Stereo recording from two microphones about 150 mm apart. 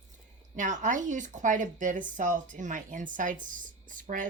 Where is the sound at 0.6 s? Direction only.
60° right (ahead or behind).